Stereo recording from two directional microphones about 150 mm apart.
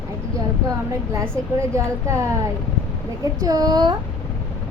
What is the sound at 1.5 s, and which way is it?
Speech, 20° right (ahead or behind).